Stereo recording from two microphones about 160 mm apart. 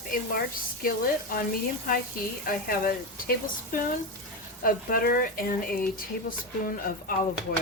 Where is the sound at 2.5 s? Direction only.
65° left (ahead or behind).